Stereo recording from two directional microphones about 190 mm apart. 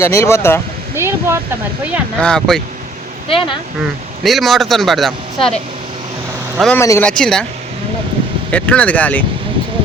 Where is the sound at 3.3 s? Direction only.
25° left (ahead or behind).